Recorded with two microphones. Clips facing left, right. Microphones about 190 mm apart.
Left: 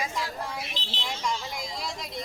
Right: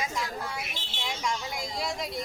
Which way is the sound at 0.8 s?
50° right (ahead or behind).